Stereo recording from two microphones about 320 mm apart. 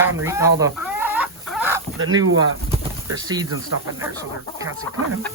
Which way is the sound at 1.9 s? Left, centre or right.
Right.